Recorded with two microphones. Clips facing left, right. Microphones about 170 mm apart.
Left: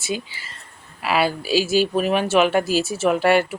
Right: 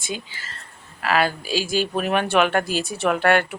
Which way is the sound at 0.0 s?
10° left (ahead or behind).